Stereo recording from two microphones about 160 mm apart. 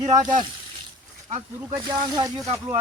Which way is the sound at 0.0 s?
45° right (ahead or behind).